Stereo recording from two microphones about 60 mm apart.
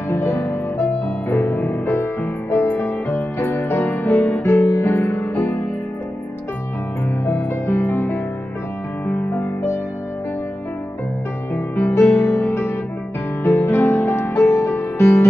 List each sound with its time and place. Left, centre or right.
0.1 s music: left
3.5 s music: left
7.6 s music: left
11.5 s music: left